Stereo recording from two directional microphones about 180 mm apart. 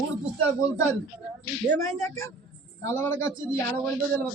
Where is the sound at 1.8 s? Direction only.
15° left (ahead or behind).